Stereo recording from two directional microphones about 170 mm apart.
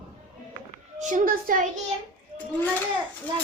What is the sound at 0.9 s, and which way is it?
Speech, 50° right (ahead or behind).